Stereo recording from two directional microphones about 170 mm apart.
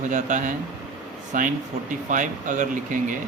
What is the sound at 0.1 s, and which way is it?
Speech, 50° right (ahead or behind).